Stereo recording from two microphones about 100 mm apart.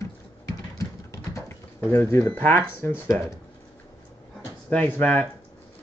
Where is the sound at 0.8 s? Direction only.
30° left (ahead or behind).